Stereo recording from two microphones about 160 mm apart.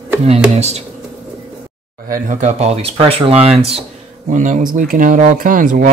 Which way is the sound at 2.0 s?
55° right (ahead or behind).